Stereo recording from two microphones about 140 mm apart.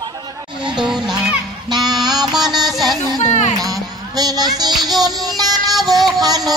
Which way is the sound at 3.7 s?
25° right (ahead or behind).